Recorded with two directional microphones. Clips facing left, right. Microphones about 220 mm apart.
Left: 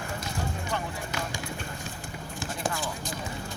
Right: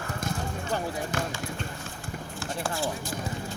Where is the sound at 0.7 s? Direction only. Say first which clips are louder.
Right 4 dB; 35° right (ahead or behind).